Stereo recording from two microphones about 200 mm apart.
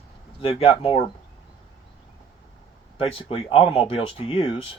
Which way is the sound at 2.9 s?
30° left (ahead or behind).